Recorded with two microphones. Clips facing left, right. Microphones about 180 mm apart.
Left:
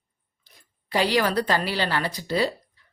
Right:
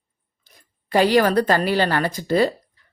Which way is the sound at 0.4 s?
50° right (ahead or behind).